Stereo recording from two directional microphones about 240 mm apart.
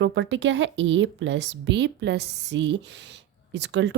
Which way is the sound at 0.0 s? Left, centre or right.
Right.